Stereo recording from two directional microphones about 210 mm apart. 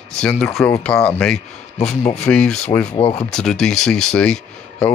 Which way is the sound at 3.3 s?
Centre (ahead or behind).